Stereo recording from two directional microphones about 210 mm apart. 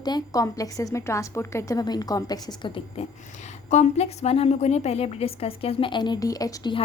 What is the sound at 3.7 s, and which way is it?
Speech, 30° left (ahead or behind).